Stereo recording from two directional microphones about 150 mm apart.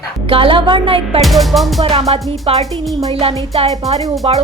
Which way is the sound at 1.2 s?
Centre (ahead or behind).